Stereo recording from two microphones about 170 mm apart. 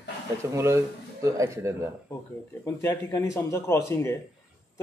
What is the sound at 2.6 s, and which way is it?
Speech, 15° left (ahead or behind).